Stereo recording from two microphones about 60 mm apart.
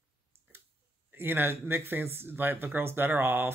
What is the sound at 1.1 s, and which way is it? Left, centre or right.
Speech, right.